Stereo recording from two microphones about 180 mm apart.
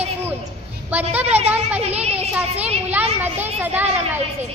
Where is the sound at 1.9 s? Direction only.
35° right (ahead or behind).